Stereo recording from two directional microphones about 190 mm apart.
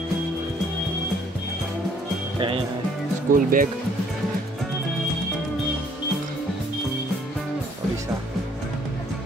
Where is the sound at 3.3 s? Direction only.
45° right (ahead or behind).